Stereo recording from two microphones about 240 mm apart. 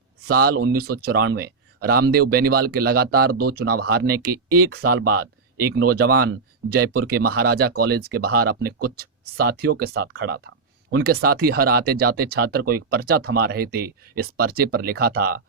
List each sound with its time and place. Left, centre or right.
0.3 s speech: right